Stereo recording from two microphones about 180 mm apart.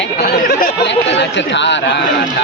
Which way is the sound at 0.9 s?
80° left.